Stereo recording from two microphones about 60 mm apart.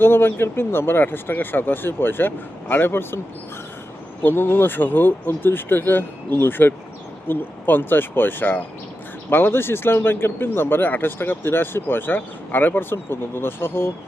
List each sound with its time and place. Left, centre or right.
0.0 s speech: left
4.2 s speech: left